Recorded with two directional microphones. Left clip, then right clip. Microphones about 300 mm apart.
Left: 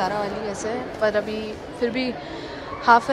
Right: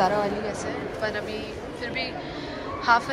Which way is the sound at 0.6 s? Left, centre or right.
Centre.